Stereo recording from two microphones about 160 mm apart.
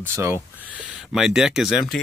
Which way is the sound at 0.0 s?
15° right (ahead or behind).